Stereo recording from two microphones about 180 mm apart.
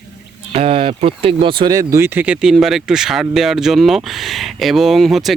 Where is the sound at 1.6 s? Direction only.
20° right (ahead or behind).